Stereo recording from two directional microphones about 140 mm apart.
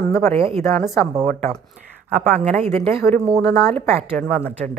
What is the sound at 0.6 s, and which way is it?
Speech, 20° left (ahead or behind).